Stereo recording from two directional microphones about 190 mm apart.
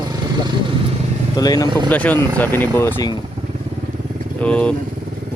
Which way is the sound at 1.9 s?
10° left (ahead or behind).